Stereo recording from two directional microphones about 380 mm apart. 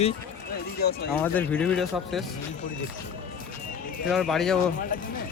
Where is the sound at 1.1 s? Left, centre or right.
Centre.